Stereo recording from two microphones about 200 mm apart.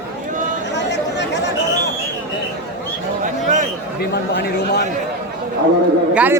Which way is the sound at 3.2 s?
40° right (ahead or behind).